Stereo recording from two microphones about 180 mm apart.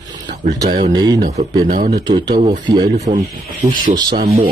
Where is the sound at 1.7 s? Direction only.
50° right (ahead or behind).